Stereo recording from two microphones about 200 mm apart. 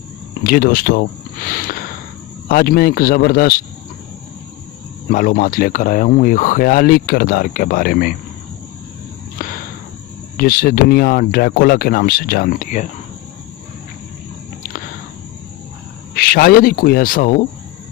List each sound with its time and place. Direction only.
0.4 s speech: 45° left (ahead or behind)
5.0 s speech: 45° left (ahead or behind)
9.4 s a sound: 45° left (ahead or behind)
10.3 s speech: 50° left (ahead or behind)
16.1 s speech: 50° left (ahead or behind)